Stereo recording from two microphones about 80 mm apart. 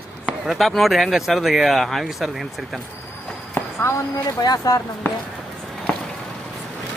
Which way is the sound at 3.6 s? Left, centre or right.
Left.